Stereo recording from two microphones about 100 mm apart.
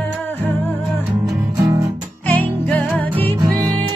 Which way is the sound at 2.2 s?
15° left (ahead or behind).